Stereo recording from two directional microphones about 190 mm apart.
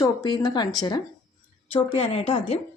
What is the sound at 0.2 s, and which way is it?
Speech, 20° left (ahead or behind).